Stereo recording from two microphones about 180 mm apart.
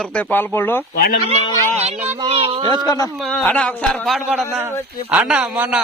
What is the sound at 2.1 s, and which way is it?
Speech, 35° right (ahead or behind).